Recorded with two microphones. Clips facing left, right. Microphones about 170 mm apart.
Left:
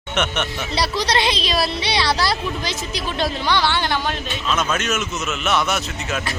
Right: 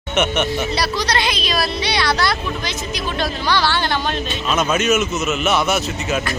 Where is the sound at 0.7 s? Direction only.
25° left (ahead or behind).